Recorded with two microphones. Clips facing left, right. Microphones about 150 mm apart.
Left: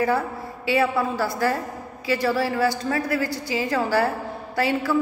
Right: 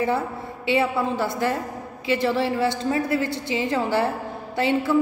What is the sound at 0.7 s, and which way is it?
A woman's voice, 20° right (ahead or behind).